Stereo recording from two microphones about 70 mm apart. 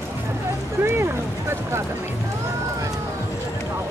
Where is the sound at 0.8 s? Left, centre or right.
Right.